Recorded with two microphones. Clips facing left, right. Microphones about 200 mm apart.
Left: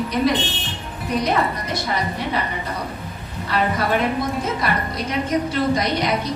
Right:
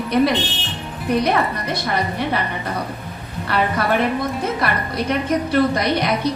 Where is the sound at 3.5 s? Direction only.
65° right (ahead or behind).